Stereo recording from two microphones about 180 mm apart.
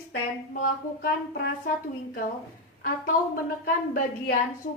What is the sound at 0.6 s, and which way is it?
Music, 55° left (ahead or behind).